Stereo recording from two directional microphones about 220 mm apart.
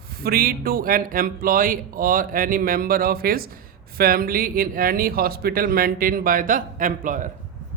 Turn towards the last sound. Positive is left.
turn(degrees=-35)  # may be behind; listen again after turning